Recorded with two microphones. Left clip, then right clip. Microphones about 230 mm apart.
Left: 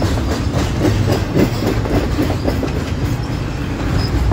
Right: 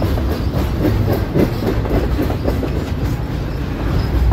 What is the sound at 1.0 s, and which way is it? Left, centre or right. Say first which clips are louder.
Train: left 1 dB; left.